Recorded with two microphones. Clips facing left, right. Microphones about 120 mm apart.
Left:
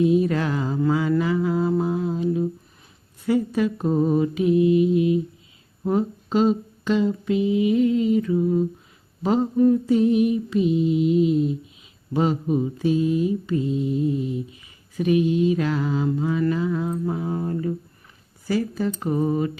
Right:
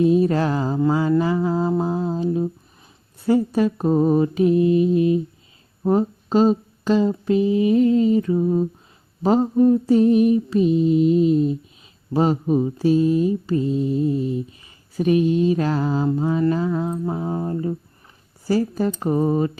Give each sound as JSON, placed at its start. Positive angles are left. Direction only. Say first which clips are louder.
{"t": 0.0, "sound": "mantra", "louder": "right 2 dB", "side_deg": -35}
{"t": 16.8, "sound": "music", "louder": "right 1 dB", "side_deg": -25}
{"t": 18.4, "sound": "mantra", "louder": "right 3 dB", "side_deg": -40}